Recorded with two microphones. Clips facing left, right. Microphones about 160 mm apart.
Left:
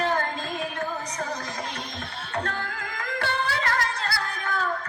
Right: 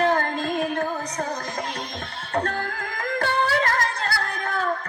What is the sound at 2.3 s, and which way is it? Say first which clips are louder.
Music: right 5 dB; 45° right (ahead or behind).